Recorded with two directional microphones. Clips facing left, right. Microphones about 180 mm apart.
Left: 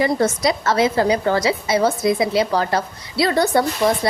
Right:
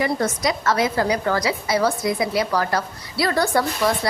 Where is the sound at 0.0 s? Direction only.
30° left (ahead or behind).